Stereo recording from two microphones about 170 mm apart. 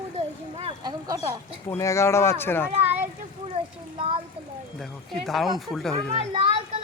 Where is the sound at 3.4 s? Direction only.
35° right (ahead or behind).